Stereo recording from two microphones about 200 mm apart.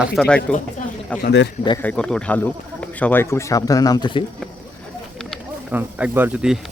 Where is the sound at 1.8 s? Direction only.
5° left (ahead or behind).